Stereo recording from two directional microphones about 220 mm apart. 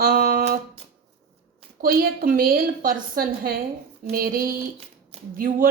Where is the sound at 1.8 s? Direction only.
40° right (ahead or behind).